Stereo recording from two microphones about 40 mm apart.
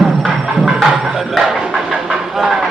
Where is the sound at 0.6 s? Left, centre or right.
Centre.